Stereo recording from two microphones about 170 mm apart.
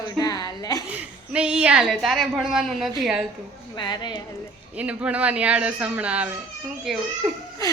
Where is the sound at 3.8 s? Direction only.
25° left (ahead or behind).